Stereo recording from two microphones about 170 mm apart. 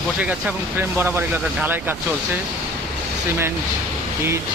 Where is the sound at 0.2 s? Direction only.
10° right (ahead or behind).